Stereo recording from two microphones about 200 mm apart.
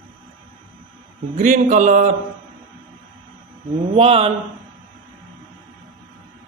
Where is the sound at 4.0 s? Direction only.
30° right (ahead or behind).